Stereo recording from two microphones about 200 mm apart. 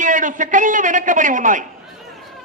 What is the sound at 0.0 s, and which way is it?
A man's voice, 40° right (ahead or behind).